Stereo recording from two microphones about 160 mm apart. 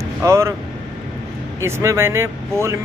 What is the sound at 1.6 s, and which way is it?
Speech, 15° right (ahead or behind).